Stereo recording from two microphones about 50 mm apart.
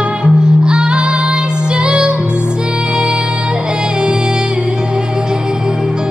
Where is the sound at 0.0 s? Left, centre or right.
Centre.